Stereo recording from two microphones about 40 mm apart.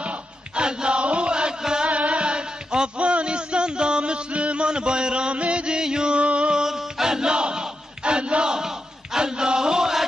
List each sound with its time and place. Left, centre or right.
0.0 s battle cry: right
0.7 s music: right
1.9 s a sound: right
6.6 s battle cry: centre